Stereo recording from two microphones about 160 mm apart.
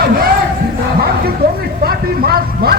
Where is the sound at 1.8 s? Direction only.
70° right (ahead or behind).